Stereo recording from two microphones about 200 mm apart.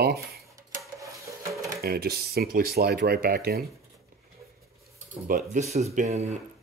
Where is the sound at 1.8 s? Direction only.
50° right (ahead or behind).